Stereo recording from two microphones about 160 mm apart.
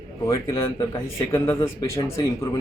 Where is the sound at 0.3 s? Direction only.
20° left (ahead or behind).